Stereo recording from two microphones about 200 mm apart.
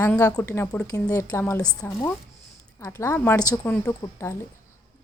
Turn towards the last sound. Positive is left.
turn(degrees=15)  # may be behind; listen again after turning